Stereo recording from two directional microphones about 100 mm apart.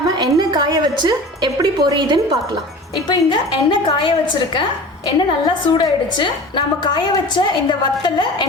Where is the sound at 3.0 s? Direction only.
50° left (ahead or behind).